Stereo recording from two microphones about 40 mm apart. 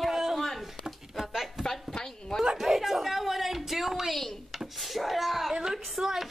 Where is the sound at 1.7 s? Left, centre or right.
Centre.